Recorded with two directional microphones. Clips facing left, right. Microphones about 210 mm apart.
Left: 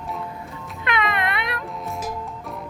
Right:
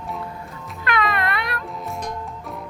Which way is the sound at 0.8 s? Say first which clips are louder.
Right 1 dB; 20° left (ahead or behind).